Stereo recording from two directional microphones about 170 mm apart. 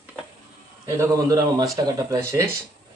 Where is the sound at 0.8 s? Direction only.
15° right (ahead or behind).